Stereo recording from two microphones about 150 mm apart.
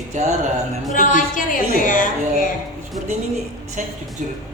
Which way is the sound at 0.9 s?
60° left (ahead or behind).